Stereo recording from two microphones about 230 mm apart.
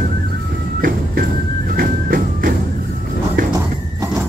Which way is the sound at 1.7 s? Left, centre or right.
Right.